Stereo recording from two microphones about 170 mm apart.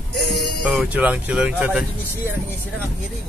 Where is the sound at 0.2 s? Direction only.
75° left (ahead or behind).